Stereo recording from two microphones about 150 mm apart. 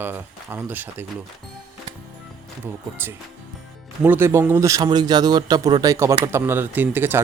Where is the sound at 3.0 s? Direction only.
15° right (ahead or behind).